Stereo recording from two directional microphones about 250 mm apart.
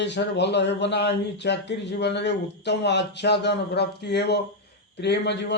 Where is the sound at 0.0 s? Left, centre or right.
Left.